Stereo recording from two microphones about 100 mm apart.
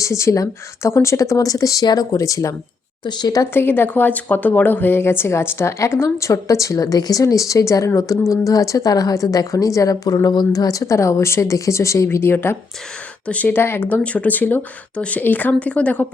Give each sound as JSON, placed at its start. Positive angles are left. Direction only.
{"t": 0.0, "sound": "speech", "side_deg": 30}
{"t": 3.0, "sound": "speech", "side_deg": 45}
{"t": 3.5, "sound": "speech", "side_deg": 20}